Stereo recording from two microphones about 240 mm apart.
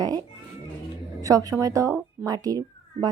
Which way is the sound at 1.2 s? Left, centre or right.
Centre.